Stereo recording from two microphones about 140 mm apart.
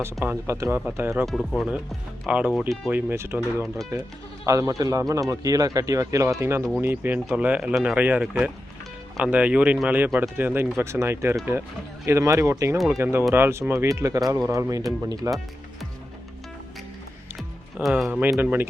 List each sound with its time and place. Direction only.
0.0 s speech: 15° right (ahead or behind)
1.2 s speech: centre (ahead or behind)
2.9 s a man's voice: 15° right (ahead or behind)
12.7 s speech: centre (ahead or behind)
13.0 s a man's voice: 15° right (ahead or behind)
17.7 s speech: 5° right (ahead or behind)